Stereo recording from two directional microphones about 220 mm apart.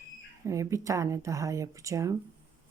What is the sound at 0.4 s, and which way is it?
Speech, 15° right (ahead or behind).